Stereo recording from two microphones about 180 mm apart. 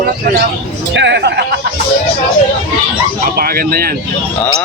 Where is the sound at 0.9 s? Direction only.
75° right (ahead or behind).